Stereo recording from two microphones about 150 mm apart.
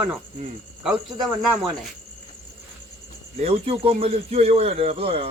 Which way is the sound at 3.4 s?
40° right (ahead or behind).